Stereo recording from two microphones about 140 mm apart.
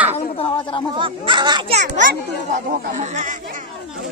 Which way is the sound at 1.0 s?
35° right (ahead or behind).